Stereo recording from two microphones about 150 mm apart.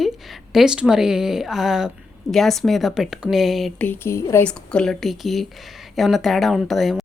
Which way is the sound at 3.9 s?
15° left (ahead or behind).